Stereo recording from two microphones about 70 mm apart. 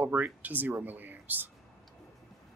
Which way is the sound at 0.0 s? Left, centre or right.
Right.